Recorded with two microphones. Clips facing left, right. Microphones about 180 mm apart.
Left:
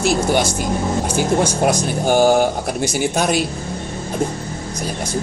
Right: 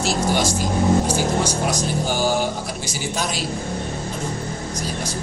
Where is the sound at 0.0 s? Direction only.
55° left (ahead or behind).